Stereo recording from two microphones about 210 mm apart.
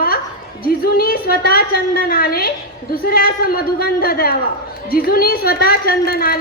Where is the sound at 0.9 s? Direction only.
45° left (ahead or behind).